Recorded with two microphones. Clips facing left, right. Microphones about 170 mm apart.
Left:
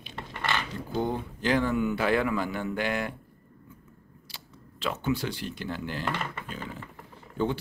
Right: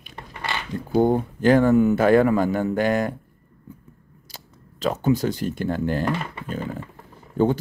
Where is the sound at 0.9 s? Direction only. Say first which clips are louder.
Right 11 dB; 50° right (ahead or behind).